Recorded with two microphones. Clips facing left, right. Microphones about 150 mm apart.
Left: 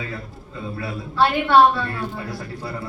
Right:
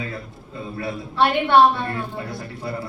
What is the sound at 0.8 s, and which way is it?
A man's voice, 25° right (ahead or behind).